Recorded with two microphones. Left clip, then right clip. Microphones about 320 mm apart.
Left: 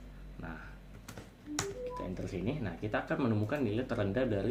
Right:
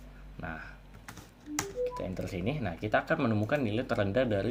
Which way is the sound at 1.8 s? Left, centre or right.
Right.